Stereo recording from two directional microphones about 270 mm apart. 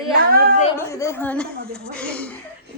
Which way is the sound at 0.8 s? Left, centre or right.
Centre.